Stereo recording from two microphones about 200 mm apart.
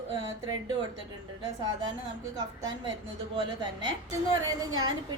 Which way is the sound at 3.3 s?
20° right (ahead or behind).